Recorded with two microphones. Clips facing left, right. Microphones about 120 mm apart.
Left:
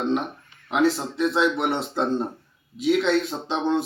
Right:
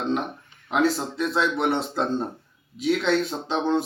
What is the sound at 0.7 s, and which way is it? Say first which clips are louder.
A man's voice: left 1 dB; centre (ahead or behind).